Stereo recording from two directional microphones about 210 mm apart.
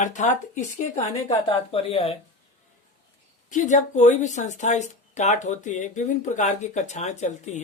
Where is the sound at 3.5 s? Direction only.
35° left (ahead or behind).